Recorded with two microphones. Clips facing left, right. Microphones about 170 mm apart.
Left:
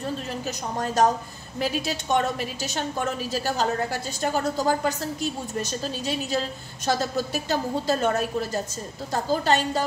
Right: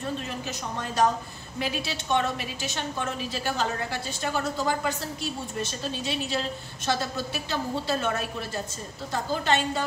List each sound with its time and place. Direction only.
0.5 s a woman's voice: 40° left (ahead or behind)